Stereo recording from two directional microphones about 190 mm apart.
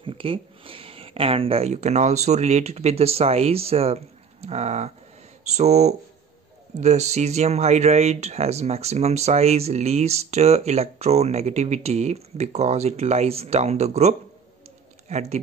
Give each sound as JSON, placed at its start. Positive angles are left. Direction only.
{"t": 0.0, "sound": "speech", "side_deg": -30}